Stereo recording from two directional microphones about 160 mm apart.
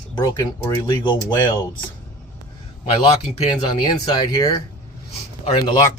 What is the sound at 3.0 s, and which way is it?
Speech, 35° left (ahead or behind).